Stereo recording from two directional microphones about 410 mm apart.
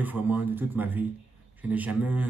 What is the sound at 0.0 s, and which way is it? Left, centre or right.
Speech, centre.